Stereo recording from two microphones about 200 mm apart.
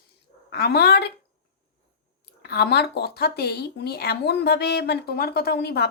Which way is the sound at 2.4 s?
55° left (ahead or behind).